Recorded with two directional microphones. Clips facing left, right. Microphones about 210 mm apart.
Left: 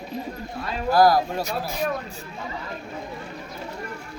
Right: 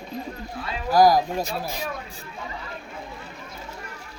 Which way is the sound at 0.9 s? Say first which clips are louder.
Even; 15° right (ahead or behind).